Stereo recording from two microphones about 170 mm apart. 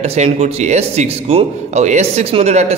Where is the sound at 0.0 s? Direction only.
35° right (ahead or behind).